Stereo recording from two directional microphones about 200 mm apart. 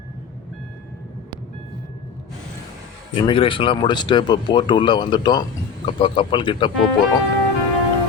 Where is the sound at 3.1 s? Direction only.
25° left (ahead or behind).